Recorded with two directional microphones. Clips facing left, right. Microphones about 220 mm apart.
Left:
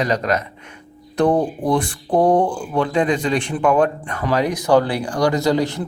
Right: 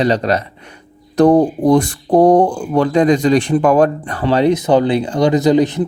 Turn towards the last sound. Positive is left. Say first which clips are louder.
# right 6 dB
turn(degrees=-20)  # may be behind; listen again after turning